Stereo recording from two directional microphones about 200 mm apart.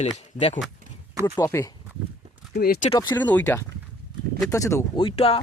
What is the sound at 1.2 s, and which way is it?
Speech, 15° left (ahead or behind).